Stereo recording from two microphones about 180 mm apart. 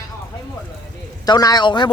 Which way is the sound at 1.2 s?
20° left (ahead or behind).